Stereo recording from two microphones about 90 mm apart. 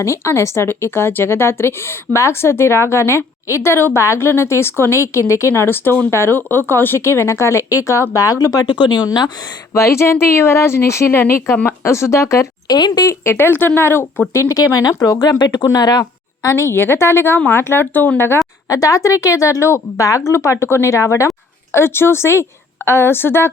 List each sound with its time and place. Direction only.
0.0 s a woman's voice: 30° left (ahead or behind); by 9.3 s 50° left (ahead or behind)
9.7 s a woman's voice: 30° left (ahead or behind)
12.6 s speech: 50° left (ahead or behind)
13.1 s a woman's voice: 30° left (ahead or behind)
14.3 s a woman's voice: 40° left (ahead or behind)
16.5 s a woman's voice: 35° left (ahead or behind)
18.7 s a woman's voice: 40° left (ahead or behind)